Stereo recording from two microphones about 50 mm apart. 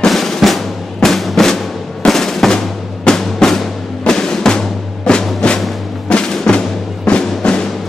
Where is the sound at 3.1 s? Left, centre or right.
Centre.